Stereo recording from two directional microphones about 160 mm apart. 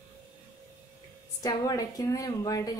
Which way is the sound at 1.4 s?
25° left (ahead or behind).